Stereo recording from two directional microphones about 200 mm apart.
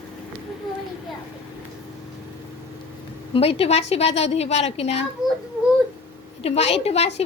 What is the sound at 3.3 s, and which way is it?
A woman's voice, 30° left (ahead or behind).